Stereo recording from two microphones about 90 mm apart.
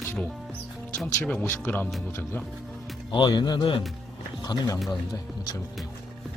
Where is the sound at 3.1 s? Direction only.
55° left (ahead or behind).